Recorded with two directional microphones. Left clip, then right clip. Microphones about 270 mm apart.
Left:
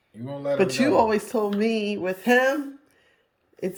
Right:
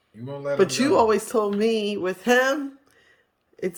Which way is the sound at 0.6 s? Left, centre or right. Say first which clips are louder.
Right 1 dB; centre.